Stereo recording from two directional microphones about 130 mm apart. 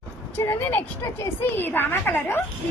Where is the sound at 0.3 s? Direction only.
20° left (ahead or behind).